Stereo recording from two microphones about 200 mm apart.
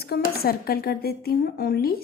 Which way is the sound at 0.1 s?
50° left (ahead or behind).